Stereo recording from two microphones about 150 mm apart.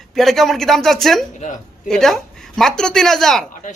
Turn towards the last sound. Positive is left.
turn(degrees=0)  # may be behind; listen again after turning